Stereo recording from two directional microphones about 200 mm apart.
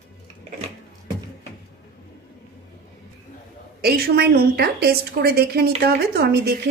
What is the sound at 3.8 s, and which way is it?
A woman's voice, 50° right (ahead or behind).